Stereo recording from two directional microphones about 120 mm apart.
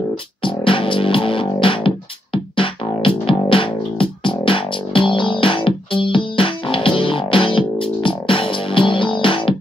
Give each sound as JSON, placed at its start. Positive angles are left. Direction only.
{"t": 0.4, "sound": "music", "side_deg": 45}